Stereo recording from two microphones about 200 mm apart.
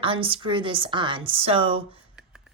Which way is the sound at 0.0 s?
25° right (ahead or behind).